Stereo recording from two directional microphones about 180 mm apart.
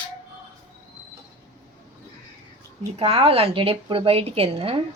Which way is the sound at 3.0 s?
30° right (ahead or behind).